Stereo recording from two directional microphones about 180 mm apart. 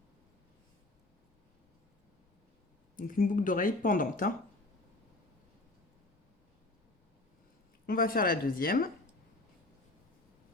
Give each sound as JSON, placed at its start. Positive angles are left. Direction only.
{"t": 2.9, "sound": "speech", "side_deg": 50}
{"t": 7.9, "sound": "speech", "side_deg": 55}